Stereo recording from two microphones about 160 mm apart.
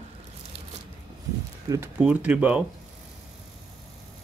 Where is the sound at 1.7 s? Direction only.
15° right (ahead or behind).